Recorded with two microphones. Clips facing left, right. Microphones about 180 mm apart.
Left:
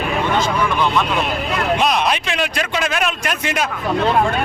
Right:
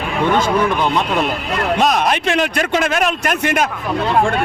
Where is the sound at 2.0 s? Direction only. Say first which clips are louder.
Right 4 dB; 50° right (ahead or behind).